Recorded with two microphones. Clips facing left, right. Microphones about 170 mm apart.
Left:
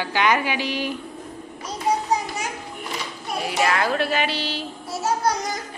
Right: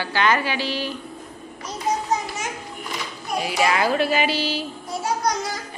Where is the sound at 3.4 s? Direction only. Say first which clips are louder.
Right 1 dB; 5° right (ahead or behind).